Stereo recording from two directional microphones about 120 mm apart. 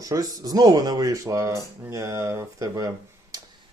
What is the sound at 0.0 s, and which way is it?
Speech, 30° right (ahead or behind).